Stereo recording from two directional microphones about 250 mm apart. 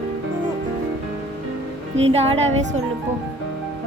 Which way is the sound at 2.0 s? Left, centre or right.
Right.